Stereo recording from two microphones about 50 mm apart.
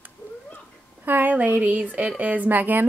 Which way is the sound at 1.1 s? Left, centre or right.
Right.